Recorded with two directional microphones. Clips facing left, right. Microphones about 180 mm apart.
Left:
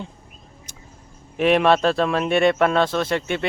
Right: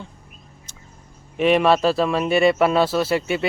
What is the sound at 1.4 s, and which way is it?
Speech, centre (ahead or behind).